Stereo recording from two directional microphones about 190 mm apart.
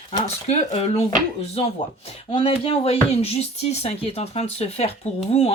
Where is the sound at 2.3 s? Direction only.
30° left (ahead or behind).